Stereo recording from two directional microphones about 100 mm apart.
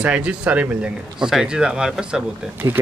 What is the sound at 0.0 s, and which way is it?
Speech, 10° right (ahead or behind).